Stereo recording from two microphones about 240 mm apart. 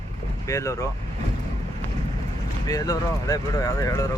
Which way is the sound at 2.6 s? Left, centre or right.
Centre.